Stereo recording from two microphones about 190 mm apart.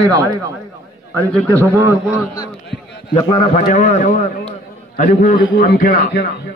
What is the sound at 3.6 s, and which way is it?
A man's voice, 40° left (ahead or behind).